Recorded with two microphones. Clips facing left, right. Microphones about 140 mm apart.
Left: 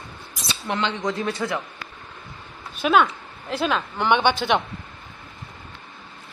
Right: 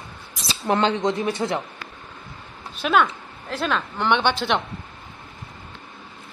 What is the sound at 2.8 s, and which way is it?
A woman's voice, centre (ahead or behind).